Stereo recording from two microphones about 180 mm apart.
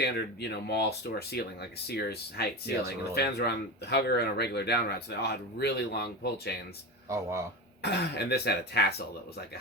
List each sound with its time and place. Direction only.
0.0 s speech: 65° left (ahead or behind)
7.1 s speech: 15° right (ahead or behind)
7.8 s speech: 65° left (ahead or behind)